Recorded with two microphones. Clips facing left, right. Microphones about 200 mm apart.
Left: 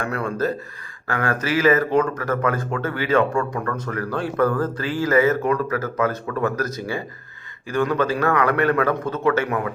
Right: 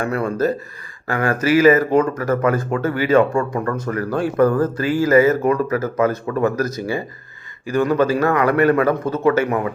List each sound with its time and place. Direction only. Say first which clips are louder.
0.0 s speech: right 4 dB; 10° right (ahead or behind)
3.3 s speech: right 3 dB; 25° right (ahead or behind)
3.8 s speech: right 4 dB; 10° right (ahead or behind)